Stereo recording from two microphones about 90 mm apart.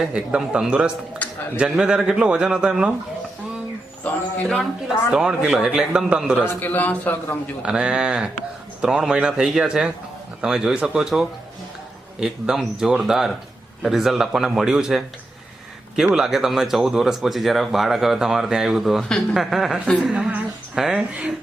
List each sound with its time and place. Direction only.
0.0 s a man's voice: 10° right (ahead or behind)
1.2 s a sound: 15° left (ahead or behind)
1.5 s a man's voice: 5° right (ahead or behind)
5.1 s a man's voice: 5° right (ahead or behind)
6.4 s a man's voice: 20° left (ahead or behind)
7.6 s a man's voice: 10° right (ahead or behind)
16.1 s a woman's voice: 5° right (ahead or behind)